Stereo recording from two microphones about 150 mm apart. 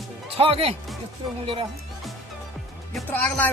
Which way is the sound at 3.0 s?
10° left (ahead or behind).